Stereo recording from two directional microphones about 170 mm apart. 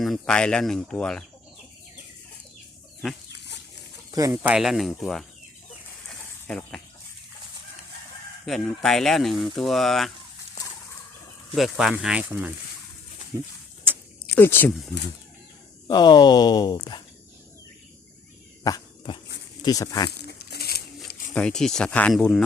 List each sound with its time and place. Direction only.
0.0 s speech: 5° left (ahead or behind)
3.3 s dog: 90° left
4.1 s speech: 20° right (ahead or behind)
4.4 s speech: 5° right (ahead or behind)
6.1 s snake: 5° left (ahead or behind)
8.4 s speech: centre (ahead or behind)
11.5 s speech: centre (ahead or behind)
13.9 s a sound: 10° right (ahead or behind)
14.3 s speech: 10° left (ahead or behind)
15.9 s speech: 25° left (ahead or behind)
18.6 s a sound: 25° left (ahead or behind)
19.6 s speech: 20° left (ahead or behind)
20.1 s a sound: 70° left (ahead or behind)
21.3 s speech: 5° left (ahead or behind)